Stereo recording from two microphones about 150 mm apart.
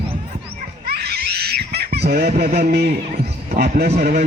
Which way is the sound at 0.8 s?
90° right.